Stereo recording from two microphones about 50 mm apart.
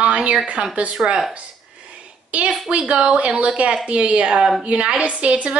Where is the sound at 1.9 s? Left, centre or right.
Right.